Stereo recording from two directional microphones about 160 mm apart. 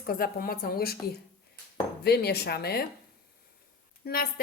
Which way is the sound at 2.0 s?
90° left.